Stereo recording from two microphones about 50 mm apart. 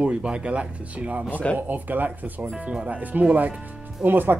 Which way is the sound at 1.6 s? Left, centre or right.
Right.